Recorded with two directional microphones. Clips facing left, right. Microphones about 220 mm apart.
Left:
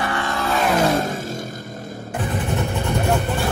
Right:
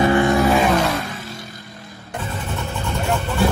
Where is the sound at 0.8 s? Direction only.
45° left (ahead or behind).